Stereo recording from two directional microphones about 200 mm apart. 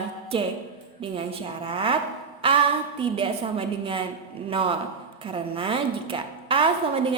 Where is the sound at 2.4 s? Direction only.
25° right (ahead or behind).